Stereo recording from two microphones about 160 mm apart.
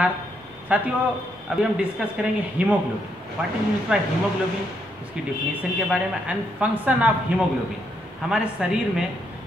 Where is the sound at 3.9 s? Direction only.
5° right (ahead or behind).